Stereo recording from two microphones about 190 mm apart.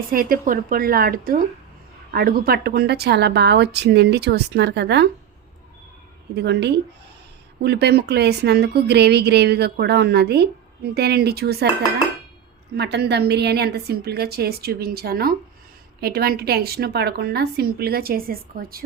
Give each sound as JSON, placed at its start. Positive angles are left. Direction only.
{"t": 0.1, "sound": "a woman's voice", "side_deg": -50}
{"t": 6.3, "sound": "a woman's voice", "side_deg": -65}
{"t": 12.7, "sound": "a woman's voice", "side_deg": -65}